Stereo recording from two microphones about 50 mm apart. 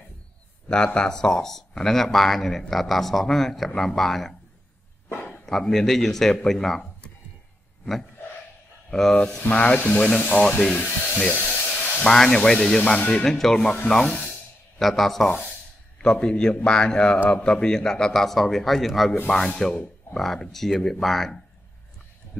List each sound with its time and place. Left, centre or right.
0.9 s a man's voice: centre
5.1 s a sound: left
5.4 s a man's voice: centre
9.5 s speech: left
11.3 s a sound: left
12.0 s a man's voice: centre
14.8 s speech: centre
16.0 s a man's voice: centre
19.2 s a man's voice: centre